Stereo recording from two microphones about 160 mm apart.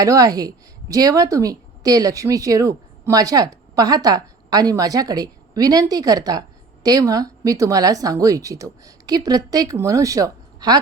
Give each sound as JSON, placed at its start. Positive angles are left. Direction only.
{"t": 0.0, "sound": "a woman's voice", "side_deg": -20}